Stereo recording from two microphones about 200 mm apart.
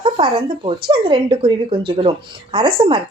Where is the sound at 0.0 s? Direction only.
25° right (ahead or behind).